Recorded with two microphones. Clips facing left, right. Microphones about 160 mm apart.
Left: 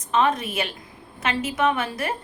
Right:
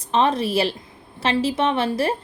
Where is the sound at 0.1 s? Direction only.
30° right (ahead or behind).